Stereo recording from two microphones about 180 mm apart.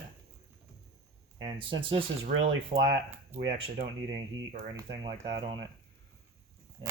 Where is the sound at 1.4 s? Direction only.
25° right (ahead or behind).